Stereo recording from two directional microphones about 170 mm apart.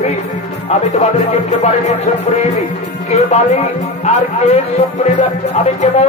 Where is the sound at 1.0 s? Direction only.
40° left (ahead or behind).